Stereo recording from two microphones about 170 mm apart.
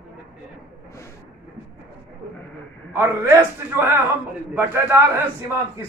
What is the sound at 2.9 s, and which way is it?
Speech, 15° right (ahead or behind).